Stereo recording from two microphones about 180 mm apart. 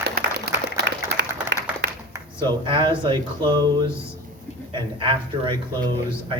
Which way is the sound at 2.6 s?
25° right (ahead or behind).